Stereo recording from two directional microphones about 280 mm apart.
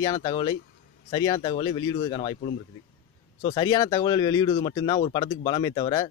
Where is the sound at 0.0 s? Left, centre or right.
Centre.